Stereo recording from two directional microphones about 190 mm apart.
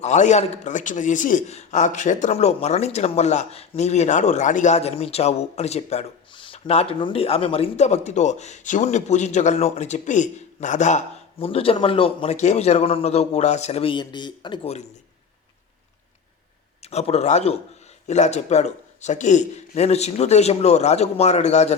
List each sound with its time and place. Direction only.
0.0 s a man's voice: 40° left (ahead or behind)
16.8 s a man's voice: 35° left (ahead or behind)